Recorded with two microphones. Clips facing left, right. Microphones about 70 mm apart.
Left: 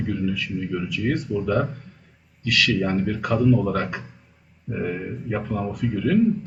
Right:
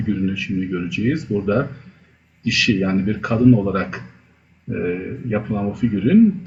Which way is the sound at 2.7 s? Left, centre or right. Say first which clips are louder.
Right 4 dB; right.